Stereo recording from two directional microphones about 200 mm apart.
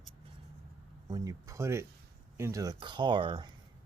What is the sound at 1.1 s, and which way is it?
Speech, 15° right (ahead or behind).